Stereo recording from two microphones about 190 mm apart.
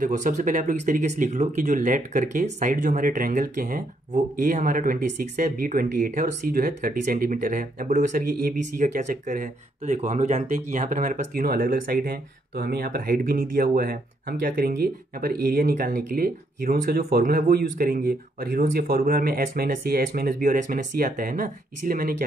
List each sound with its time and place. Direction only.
0.0 s speech: 40° right (ahead or behind)